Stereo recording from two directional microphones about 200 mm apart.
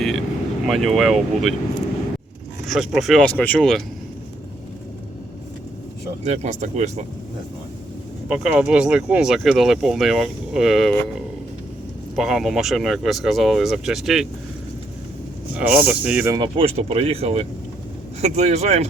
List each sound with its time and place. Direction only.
0.0 s vehicle: centre (ahead or behind)
0.7 s speech: centre (ahead or behind)
2.6 s speech: centre (ahead or behind)
6.2 s speech: 35° right (ahead or behind)
8.3 s speech: 5° right (ahead or behind)
12.1 s speech: centre (ahead or behind)
15.5 s speech: 10° right (ahead or behind)
16.3 s speech: 25° right (ahead or behind)